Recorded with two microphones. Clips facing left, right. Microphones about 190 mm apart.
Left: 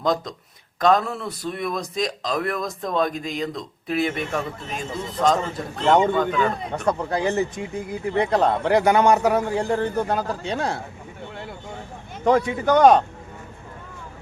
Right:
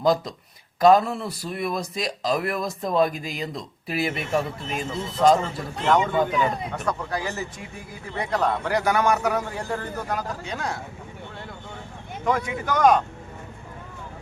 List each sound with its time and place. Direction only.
0.0 s a man's voice: 5° right (ahead or behind)
6.7 s a man's voice: 30° left (ahead or behind)
12.2 s speech: 35° left (ahead or behind)